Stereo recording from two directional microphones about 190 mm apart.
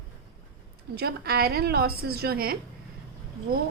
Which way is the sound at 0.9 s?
55° right (ahead or behind).